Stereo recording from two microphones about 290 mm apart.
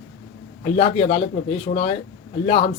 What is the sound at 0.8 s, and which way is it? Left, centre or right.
Speech, centre.